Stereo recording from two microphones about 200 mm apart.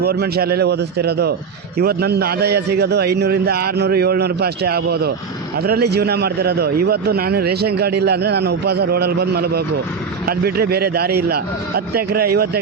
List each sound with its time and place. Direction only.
0.0 s a man's voice: 50° right (ahead or behind)